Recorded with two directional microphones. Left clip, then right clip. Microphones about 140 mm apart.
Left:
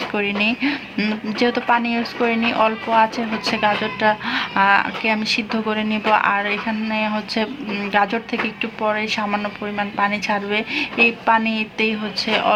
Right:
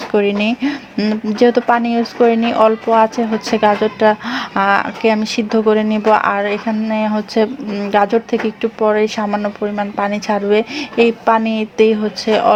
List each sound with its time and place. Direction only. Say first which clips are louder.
0.1 s speech: right 7 dB; 55° right (ahead or behind)
0.9 s speech: right 6 dB; 45° right (ahead or behind)